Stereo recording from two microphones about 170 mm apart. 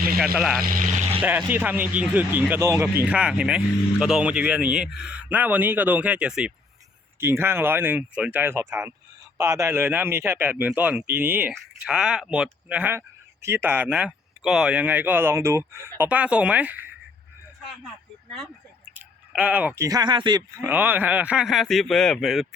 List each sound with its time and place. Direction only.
0.3 s speech: centre (ahead or behind)
0.6 s speech: 55° right (ahead or behind)
1.2 s speech: 10° right (ahead or behind)
17.8 s a sound: centre (ahead or behind)
18.9 s speech: 5° right (ahead or behind); by 20.7 s 25° right (ahead or behind)
20.7 s speech: 10° right (ahead or behind)